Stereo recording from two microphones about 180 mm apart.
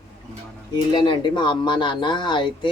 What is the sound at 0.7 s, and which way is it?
Speech, 25° left (ahead or behind).